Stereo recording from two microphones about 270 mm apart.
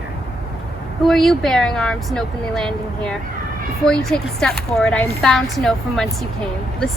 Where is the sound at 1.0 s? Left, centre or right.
Centre.